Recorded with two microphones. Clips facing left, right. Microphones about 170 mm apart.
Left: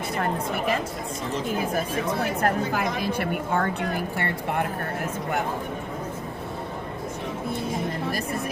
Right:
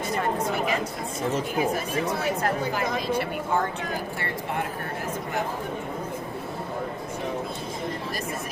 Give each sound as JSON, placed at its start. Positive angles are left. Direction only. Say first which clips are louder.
{"t": 2.4, "sound": "a woman's voice", "louder": "left 2 dB", "side_deg": 60}